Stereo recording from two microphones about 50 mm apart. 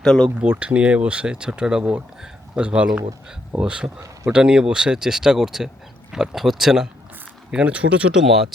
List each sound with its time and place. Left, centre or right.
0.0 s speech: centre
0.6 s speech: right; by 6.8 s centre
7.5 s speech: right
8.1 s speech: centre